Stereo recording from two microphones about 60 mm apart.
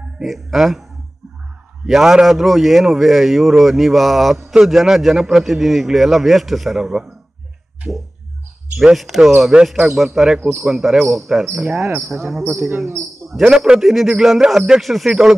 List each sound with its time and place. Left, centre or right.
0.2 s a man's voice: centre
1.9 s a man's voice: centre
12.7 s speech: right
13.4 s a man's voice: centre